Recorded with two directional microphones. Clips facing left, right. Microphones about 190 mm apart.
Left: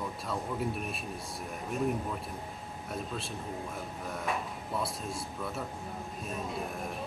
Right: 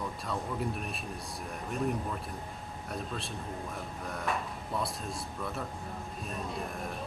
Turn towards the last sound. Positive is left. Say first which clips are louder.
# left 1 dB
turn(degrees=0)  # may be behind; listen again after turning